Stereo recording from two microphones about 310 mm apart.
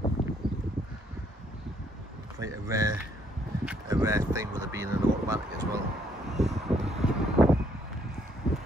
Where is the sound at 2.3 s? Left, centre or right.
Centre.